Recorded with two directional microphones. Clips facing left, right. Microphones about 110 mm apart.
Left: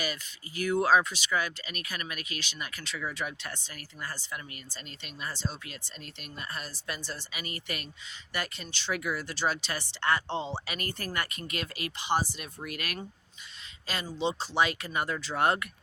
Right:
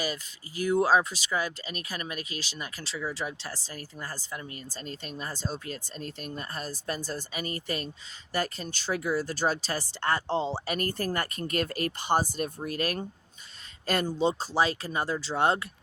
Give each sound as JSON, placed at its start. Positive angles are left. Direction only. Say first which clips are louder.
{"t": 0.0, "sound": "speech", "louder": "right 2 dB", "side_deg": -30}
{"t": 13.8, "sound": "speech", "louder": "right 6 dB", "side_deg": -50}